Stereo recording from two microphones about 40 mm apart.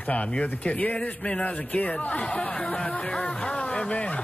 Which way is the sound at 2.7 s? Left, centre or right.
Left.